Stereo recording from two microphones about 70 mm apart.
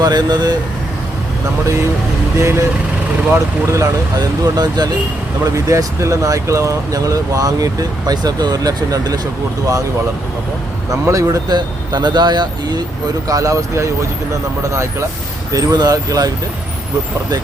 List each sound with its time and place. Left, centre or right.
0.0 s speech: right
2.4 s speech: right
4.2 s speech: right
5.5 s speech: right
11.0 s speech: right
11.4 s speech: right
13.2 s speech: right
15.5 s speech: right